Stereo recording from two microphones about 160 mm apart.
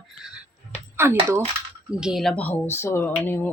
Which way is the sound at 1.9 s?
5° right (ahead or behind).